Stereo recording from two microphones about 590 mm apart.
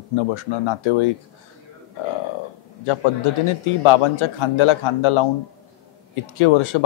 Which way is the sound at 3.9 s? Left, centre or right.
Left.